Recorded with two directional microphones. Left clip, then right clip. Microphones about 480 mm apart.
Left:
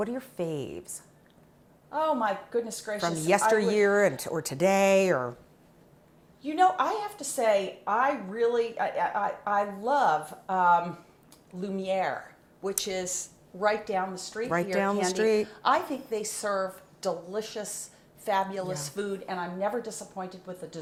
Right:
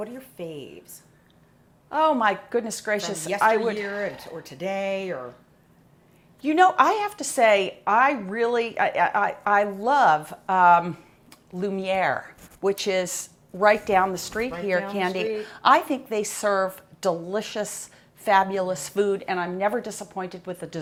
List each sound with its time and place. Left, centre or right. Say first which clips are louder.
0.0 s speech: left 3 dB; left
1.9 s a woman's voice: right 6 dB; right
3.6 s speech: left 4 dB; left
6.4 s a woman's voice: right 6 dB; right
14.9 s a woman's voice: left 1 dB; right